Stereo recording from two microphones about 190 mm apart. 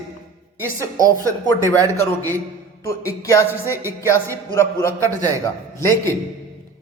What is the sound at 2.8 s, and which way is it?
A woman's voice, 15° left (ahead or behind).